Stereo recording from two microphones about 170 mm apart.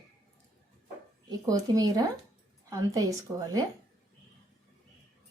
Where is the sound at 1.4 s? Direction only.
20° right (ahead or behind).